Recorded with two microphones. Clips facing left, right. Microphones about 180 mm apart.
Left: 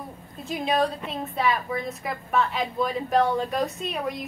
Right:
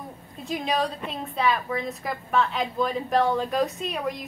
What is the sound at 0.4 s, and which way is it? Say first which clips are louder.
A woman's voice: left 2 dB; centre (ahead or behind).